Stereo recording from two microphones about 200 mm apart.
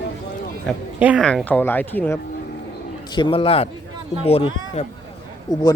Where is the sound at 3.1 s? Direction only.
25° left (ahead or behind).